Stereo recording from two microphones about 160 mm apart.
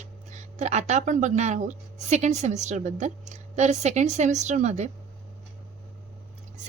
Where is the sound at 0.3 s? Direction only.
45° right (ahead or behind).